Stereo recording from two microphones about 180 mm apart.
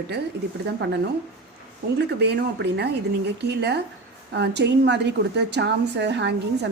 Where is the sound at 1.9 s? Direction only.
65° right (ahead or behind).